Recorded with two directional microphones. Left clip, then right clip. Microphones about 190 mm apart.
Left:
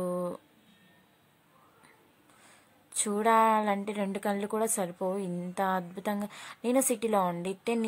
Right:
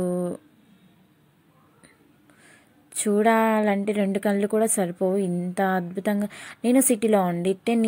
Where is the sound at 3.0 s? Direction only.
10° right (ahead or behind).